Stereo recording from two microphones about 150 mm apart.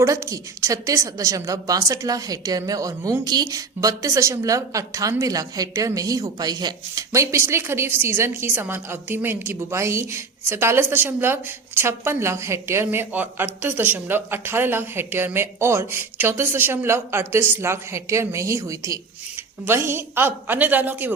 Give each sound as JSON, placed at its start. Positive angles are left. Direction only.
{"t": 0.0, "sound": "a woman's voice", "side_deg": -20}